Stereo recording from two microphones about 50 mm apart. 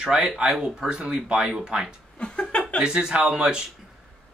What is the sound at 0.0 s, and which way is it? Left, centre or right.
Speech, centre.